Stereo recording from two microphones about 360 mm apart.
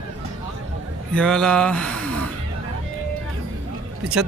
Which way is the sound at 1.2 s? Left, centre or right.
Centre.